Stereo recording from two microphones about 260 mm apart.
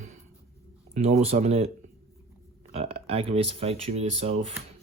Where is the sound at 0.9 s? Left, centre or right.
Right.